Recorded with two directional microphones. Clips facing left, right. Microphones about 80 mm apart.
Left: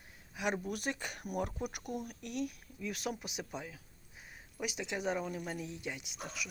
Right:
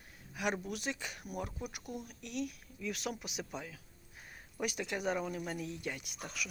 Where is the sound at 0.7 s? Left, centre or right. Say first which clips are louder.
Left 1 dB; left.